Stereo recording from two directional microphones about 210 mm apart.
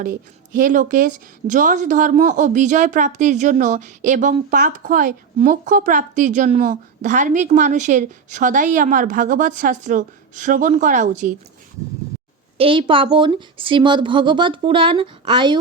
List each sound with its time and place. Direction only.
0.5 s speech: 40° right (ahead or behind)
12.5 s speech: 25° right (ahead or behind)